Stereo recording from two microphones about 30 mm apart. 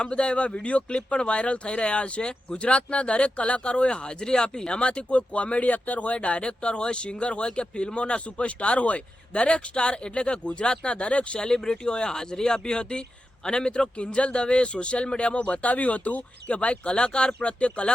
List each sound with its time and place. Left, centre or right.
0.0 s speech: left
4.8 s speech: left
6.1 s speech: left
11.3 s speech: left
15.4 s speech: left
16.6 s speech: left